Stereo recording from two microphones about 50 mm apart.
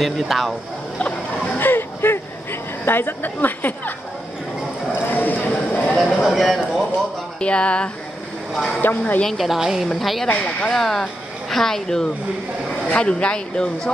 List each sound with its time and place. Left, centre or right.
0.0 s a woman's voice: centre
1.6 s a sound: left
2.8 s a woman's voice: left
4.9 s a sound: left
6.2 s speech: centre
7.3 s speech: left
8.5 s a woman's voice: centre
10.2 s speech: left
10.7 s speech: centre
12.9 s speech: left